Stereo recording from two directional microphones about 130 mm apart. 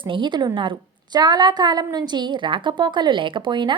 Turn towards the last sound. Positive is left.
turn(degrees=-35)  # may be behind; listen again after turning